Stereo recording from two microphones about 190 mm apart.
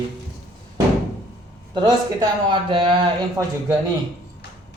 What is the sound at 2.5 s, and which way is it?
Speech, 25° right (ahead or behind).